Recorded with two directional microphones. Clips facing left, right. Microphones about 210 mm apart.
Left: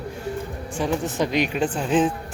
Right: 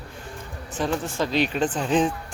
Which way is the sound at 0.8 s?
15° left (ahead or behind).